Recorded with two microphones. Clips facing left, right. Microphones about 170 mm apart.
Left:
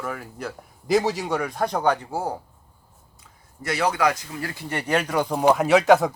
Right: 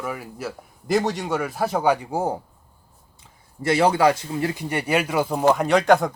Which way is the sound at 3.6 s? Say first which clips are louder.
Right 5 dB; 30° right (ahead or behind).